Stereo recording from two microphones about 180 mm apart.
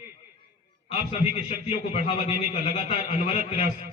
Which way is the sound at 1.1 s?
35° left (ahead or behind).